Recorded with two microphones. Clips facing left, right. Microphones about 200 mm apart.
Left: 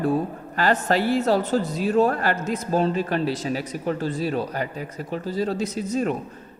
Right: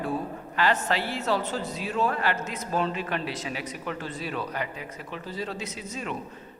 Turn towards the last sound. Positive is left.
turn(degrees=45)  # may be behind; listen again after turning